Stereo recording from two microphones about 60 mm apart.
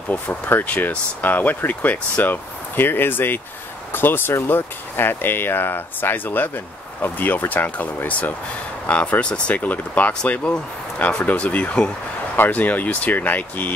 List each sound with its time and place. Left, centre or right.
0.1 s speech: left
12.4 s speech: left